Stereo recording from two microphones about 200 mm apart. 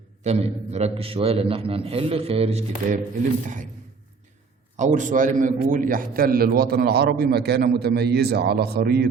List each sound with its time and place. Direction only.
0.2 s a man's voice: 30° right (ahead or behind)
4.8 s a man's voice: 40° right (ahead or behind)